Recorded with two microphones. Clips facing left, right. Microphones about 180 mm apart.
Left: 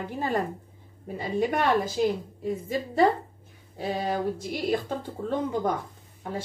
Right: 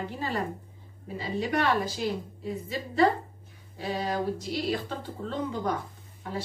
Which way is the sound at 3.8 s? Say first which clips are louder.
Left 2 dB; 50° left (ahead or behind).